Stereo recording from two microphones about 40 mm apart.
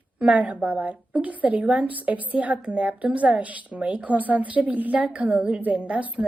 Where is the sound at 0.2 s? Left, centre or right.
Right.